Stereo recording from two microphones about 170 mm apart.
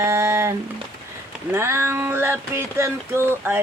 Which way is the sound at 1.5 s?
15° right (ahead or behind).